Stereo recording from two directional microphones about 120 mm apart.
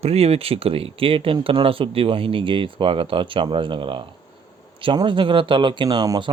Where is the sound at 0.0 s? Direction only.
60° right (ahead or behind).